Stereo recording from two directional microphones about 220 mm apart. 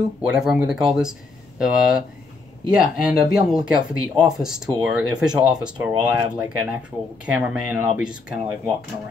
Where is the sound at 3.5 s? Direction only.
5° right (ahead or behind).